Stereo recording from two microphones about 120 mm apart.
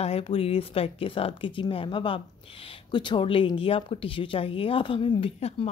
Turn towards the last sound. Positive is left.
turn(degrees=60)  # may be behind; listen again after turning